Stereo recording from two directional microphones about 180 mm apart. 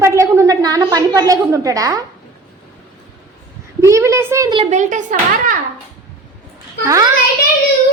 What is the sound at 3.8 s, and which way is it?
Speech, 15° right (ahead or behind).